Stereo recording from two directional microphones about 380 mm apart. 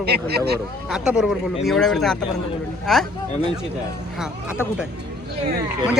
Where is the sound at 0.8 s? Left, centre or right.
Centre.